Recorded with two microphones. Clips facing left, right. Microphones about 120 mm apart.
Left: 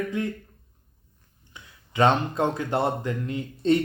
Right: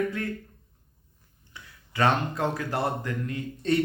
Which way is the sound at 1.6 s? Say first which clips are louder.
Even; 20° left (ahead or behind).